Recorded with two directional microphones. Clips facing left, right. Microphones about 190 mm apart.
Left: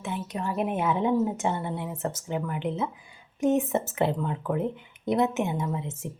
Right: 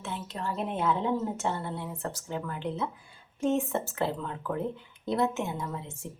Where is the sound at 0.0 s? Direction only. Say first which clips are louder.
Left 4 dB; 15° left (ahead or behind).